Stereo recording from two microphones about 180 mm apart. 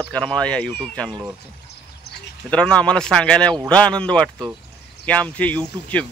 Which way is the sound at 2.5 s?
5° left (ahead or behind).